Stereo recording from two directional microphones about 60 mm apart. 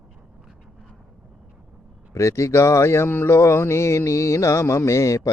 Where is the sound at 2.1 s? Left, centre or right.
Left.